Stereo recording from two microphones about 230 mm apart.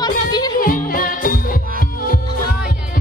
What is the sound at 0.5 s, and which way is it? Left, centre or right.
Music, left.